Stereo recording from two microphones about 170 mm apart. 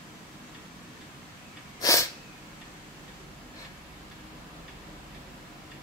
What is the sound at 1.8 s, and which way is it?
Sneeze, 20° left (ahead or behind).